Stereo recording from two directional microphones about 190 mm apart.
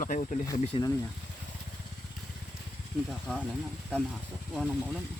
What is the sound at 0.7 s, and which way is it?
Speech, 30° left (ahead or behind).